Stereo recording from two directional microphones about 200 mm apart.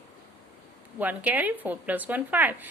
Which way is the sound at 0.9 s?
10° right (ahead or behind).